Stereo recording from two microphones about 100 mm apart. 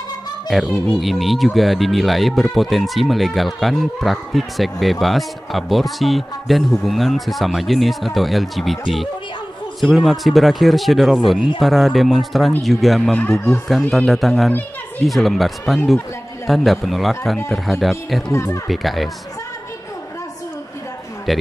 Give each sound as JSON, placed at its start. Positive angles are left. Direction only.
{"t": 0.5, "sound": "speech", "side_deg": 0}
{"t": 9.8, "sound": "speech", "side_deg": 0}
{"t": 13.3, "sound": "speech", "side_deg": 25}
{"t": 13.7, "sound": "a man's voice", "side_deg": 0}
{"t": 18.3, "sound": "speech", "side_deg": 30}
{"t": 18.7, "sound": "speech", "side_deg": 0}
{"t": 21.3, "sound": "a man's voice", "side_deg": 0}